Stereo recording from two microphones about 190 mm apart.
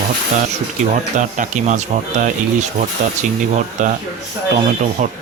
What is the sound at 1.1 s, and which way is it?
Speech, 40° right (ahead or behind).